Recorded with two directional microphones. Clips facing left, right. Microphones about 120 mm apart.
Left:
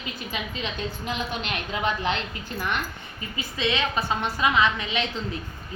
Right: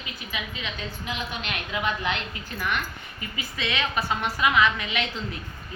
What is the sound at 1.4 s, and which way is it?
Speech, 30° left (ahead or behind).